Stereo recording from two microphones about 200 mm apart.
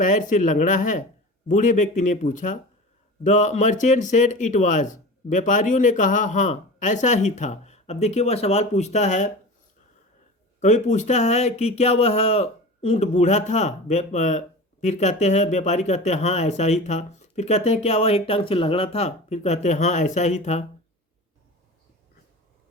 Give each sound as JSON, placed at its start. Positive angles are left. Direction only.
{"t": 0.0, "sound": "speech", "side_deg": 40}
{"t": 10.6, "sound": "speech", "side_deg": 35}